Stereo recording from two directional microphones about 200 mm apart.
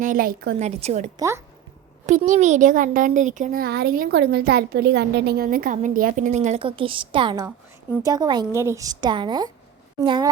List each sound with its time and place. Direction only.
0.0 s a woman's voice: 45° right (ahead or behind)
0.7 s a child's voice: 30° right (ahead or behind)